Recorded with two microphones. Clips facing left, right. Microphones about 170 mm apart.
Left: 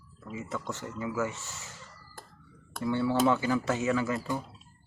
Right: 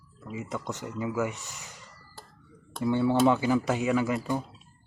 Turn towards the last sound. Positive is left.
turn(degrees=-20)  # may be behind; listen again after turning